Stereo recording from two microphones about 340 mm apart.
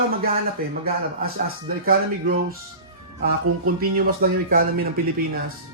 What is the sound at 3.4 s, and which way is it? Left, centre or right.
Music, right.